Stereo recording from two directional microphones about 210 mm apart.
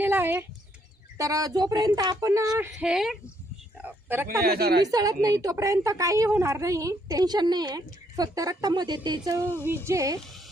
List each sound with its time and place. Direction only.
0.0 s a sound: 10° right (ahead or behind)
1.2 s a woman's voice: 15° right (ahead or behind)
2.5 s a woman's voice: 5° right (ahead or behind)
4.4 s a woman's voice: 50° right (ahead or behind)
4.8 s a woman's voice: 20° right (ahead or behind)